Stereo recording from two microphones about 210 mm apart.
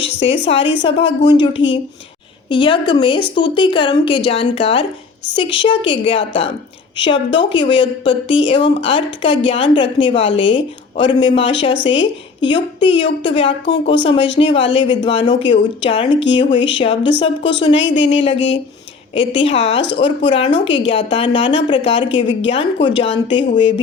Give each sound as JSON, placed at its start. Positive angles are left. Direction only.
{"t": 0.3, "sound": "speech", "side_deg": 60}
{"t": 0.9, "sound": "a woman's voice", "side_deg": 25}
{"t": 17.7, "sound": "speech", "side_deg": 60}
{"t": 18.1, "sound": "a woman's voice", "side_deg": 25}